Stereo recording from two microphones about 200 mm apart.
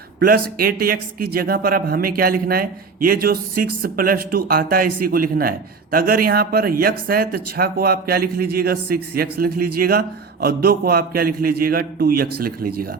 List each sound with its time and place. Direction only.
0.2 s speech: 50° right (ahead or behind)